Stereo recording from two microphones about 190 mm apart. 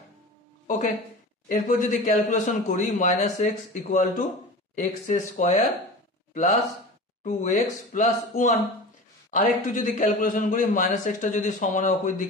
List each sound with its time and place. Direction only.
0.7 s a sound: 40° left (ahead or behind)
1.5 s a man's voice: 45° left (ahead or behind)
7.2 s a man's voice: 40° left (ahead or behind)